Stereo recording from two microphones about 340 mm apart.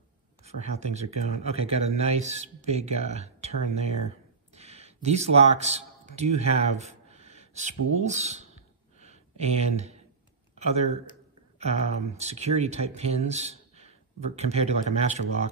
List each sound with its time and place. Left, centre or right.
0.4 s speech: centre
4.6 s a sound: centre
10.5 s speech: centre